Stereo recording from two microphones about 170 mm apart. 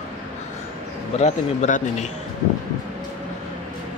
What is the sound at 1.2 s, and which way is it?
Speech, 45° left (ahead or behind).